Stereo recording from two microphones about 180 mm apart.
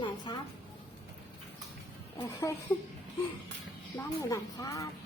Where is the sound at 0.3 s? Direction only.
25° left (ahead or behind).